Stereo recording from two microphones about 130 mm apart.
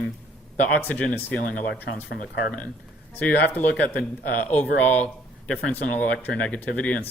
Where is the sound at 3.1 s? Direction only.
15° left (ahead or behind).